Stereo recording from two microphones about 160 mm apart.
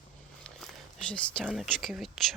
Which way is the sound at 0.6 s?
5° left (ahead or behind).